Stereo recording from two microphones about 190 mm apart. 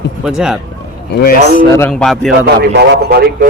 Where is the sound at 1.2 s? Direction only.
55° left (ahead or behind).